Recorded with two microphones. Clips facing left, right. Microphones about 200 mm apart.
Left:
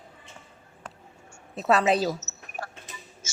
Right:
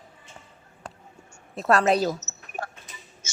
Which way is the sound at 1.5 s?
Centre (ahead or behind).